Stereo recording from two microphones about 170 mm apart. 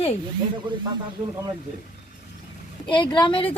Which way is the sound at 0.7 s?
25° right (ahead or behind).